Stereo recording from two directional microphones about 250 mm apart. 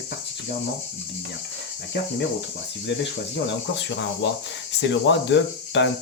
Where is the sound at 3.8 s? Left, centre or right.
Left.